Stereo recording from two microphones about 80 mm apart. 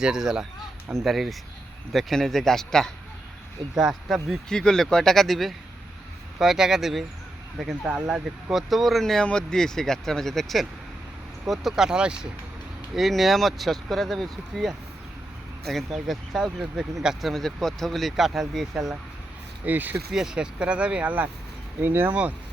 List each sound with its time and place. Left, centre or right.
0.0 s speech: centre
4.4 s speech: centre
19.6 s speech: right
20.1 s speech: centre; by 22.1 s right
22.1 s speech: centre